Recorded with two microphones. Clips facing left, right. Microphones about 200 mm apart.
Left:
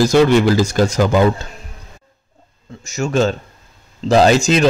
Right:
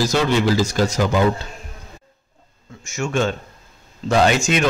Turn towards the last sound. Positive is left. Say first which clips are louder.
# left 5 dB
turn(degrees=35)  # may be behind; listen again after turning